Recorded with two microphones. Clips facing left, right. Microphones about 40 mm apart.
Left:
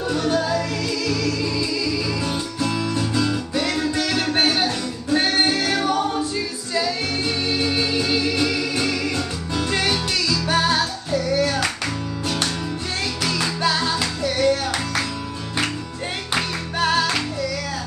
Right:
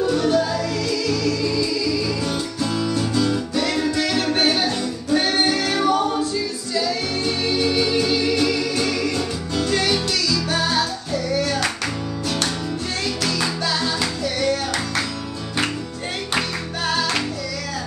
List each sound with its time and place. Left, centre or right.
0.0 s music: centre
6.3 s music: left
7.9 s music: centre
13.6 s music: centre
16.8 s music: centre